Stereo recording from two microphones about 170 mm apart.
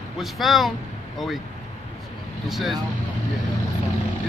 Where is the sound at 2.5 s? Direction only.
Centre (ahead or behind).